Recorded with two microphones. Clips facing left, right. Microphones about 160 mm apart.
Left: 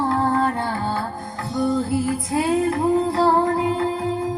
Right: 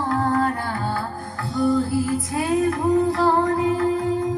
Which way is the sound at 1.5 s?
20° left (ahead or behind).